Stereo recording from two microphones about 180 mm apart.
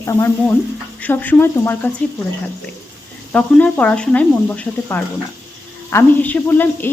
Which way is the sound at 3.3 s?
5° left (ahead or behind).